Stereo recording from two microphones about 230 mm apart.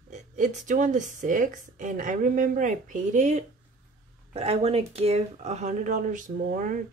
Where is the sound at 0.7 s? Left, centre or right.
Right.